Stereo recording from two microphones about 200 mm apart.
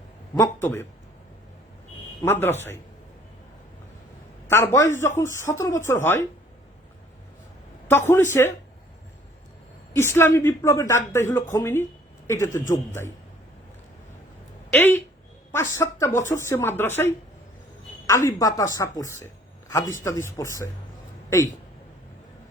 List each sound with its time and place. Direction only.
0.3 s a woman's voice: 15° left (ahead or behind)
2.2 s a woman's voice: 10° left (ahead or behind)
4.4 s a woman's voice: 15° left (ahead or behind)
7.9 s a woman's voice: 10° left (ahead or behind)
9.9 s a woman's voice: 10° left (ahead or behind)
14.7 s a woman's voice: 10° left (ahead or behind)